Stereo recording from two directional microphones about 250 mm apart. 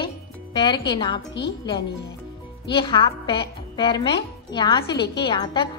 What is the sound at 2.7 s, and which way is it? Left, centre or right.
A woman's voice, centre.